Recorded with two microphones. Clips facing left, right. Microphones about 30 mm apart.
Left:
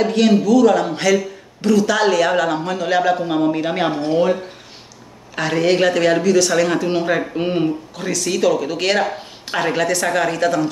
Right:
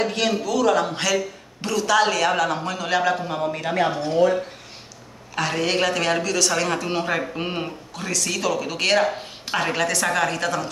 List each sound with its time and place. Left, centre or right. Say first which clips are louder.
0.0 s a man's voice: left 7 dB; centre
3.7 s speech: left 3 dB; left
5.3 s a man's voice: left 6 dB; centre